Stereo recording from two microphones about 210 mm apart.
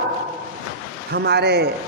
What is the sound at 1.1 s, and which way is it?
Speech, 50° right (ahead or behind).